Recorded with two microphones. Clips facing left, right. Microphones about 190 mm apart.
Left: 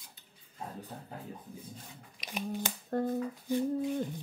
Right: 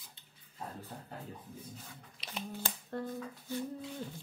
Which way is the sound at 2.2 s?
15° left (ahead or behind).